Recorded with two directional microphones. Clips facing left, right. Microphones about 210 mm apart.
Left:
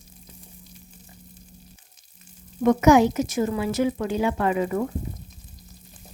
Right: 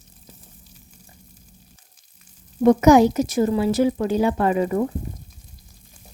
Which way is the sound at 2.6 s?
35° right (ahead or behind).